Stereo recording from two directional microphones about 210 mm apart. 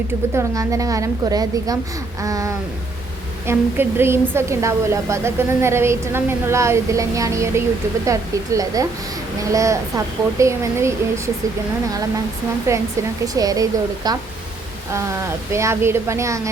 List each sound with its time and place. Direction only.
0.3 s a woman's voice: 15° right (ahead or behind)
12.7 s a woman's voice: 10° right (ahead or behind)